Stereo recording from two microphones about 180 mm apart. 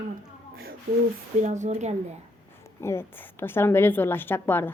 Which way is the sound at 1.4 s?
40° right (ahead or behind).